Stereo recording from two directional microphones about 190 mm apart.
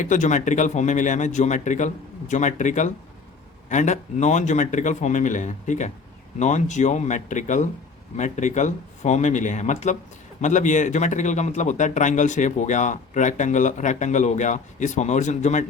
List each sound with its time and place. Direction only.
0.0 s speech: 40° left (ahead or behind)